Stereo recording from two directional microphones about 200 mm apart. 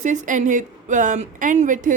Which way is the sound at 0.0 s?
40° right (ahead or behind).